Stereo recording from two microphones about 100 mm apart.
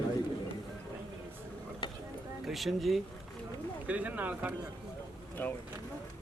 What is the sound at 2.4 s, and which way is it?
Speech, centre (ahead or behind).